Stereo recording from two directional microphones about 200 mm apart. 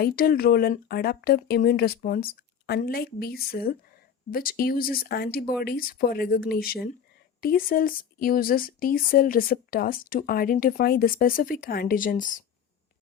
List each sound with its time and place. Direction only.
0.0 s speech: 50° left (ahead or behind)